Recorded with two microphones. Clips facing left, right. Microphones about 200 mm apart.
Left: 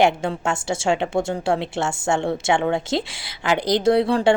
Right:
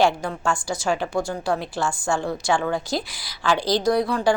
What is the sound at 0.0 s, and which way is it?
A woman's voice, 25° left (ahead or behind).